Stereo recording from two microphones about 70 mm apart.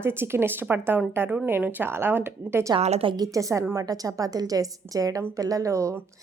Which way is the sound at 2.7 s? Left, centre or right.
Right.